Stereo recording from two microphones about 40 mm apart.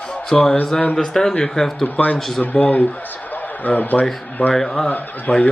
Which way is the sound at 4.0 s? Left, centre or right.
Left.